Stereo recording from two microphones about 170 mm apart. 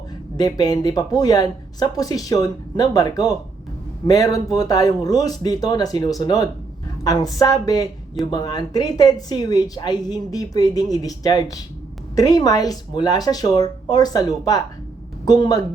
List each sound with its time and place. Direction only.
0.3 s speech: 25° left (ahead or behind)